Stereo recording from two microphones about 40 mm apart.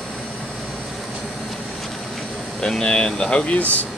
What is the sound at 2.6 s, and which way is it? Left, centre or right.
Speech, left.